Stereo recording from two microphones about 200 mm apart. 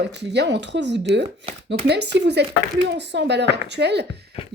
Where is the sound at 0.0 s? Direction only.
60° right (ahead or behind).